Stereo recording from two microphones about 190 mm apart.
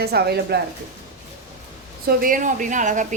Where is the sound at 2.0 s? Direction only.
45° right (ahead or behind).